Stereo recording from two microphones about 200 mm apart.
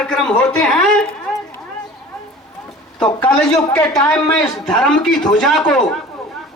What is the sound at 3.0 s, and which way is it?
Speech, 5° left (ahead or behind).